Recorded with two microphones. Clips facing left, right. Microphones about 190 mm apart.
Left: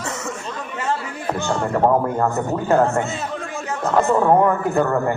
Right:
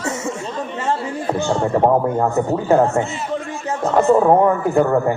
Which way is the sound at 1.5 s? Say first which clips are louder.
Right 3 dB; 30° right (ahead or behind).